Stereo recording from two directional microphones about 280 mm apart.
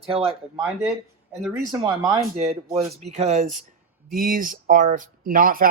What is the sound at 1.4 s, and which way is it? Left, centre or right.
Speech, centre.